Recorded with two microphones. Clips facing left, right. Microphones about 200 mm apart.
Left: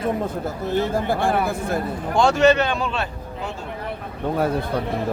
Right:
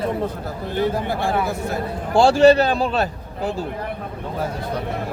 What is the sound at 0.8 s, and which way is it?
Speech, 50° left (ahead or behind).